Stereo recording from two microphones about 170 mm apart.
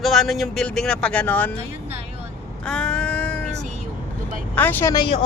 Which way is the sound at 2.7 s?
5° left (ahead or behind).